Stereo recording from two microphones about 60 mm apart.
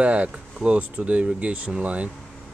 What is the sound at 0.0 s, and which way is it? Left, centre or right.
Speech, right.